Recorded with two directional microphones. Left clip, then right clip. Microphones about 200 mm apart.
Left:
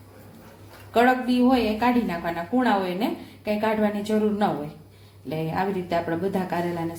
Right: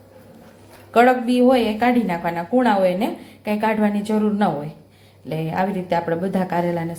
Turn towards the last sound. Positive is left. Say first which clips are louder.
# right 5 dB
turn(degrees=-20)  # may be behind; listen again after turning